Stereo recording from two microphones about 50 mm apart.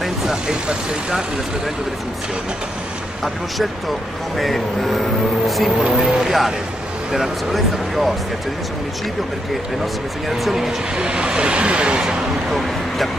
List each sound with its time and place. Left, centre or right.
0.0 s speech: centre
4.4 s speech: centre
5.9 s speech: centre
10.3 s speech: centre
11.0 s speech: centre
12.4 s a sound: centre